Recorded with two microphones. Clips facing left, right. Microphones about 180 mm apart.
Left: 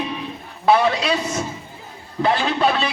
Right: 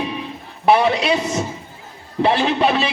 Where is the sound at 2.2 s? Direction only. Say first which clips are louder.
Right 2 dB; 20° right (ahead or behind).